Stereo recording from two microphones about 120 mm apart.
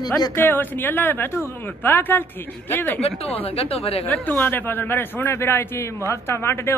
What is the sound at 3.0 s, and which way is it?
A woman's voice, 55° left (ahead or behind).